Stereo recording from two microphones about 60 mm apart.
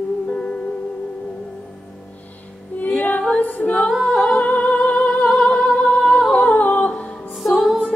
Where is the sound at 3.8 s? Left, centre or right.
Centre.